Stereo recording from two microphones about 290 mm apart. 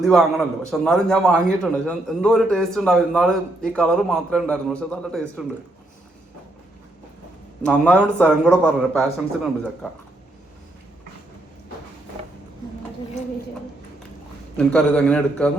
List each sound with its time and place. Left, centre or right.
0.0 s a man's voice: centre
7.6 s a man's voice: centre
14.5 s a man's voice: centre